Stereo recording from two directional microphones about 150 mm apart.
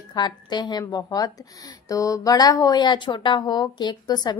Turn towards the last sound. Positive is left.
turn(degrees=30)  # may be behind; listen again after turning